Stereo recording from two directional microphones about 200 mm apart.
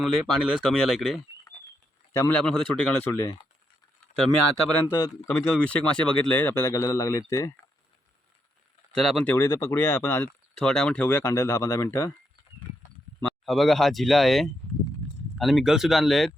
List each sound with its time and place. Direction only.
0.0 s speech: centre (ahead or behind)
4.9 s speech: 20° left (ahead or behind)
5.3 s speech: 5° left (ahead or behind)
8.9 s speech: centre (ahead or behind)
13.4 s speech: centre (ahead or behind)